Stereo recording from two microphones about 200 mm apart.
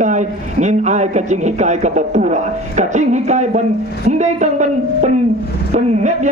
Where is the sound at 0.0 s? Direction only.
40° right (ahead or behind).